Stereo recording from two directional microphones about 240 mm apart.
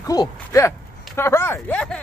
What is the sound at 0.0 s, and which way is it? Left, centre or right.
Speech, centre.